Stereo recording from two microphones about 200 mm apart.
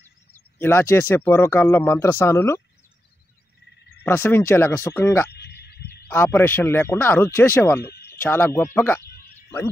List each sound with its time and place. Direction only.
0.3 s speech: 10° left (ahead or behind)
4.0 s speech: 10° left (ahead or behind)
5.3 s a sound: 55° left (ahead or behind)
6.0 s speech: 10° left (ahead or behind)
7.8 s frog: 55° left (ahead or behind)
8.1 s speech: 10° left (ahead or behind)